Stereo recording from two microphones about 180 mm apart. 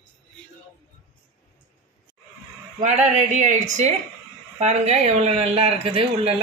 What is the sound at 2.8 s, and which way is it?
Speech, 40° right (ahead or behind).